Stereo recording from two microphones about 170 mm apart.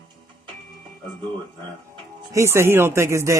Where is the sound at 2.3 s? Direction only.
15° right (ahead or behind).